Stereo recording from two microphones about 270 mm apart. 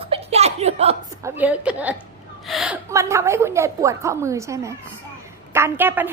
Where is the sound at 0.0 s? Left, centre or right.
Right.